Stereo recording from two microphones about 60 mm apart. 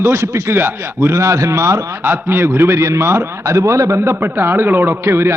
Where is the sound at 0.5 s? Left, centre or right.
Right.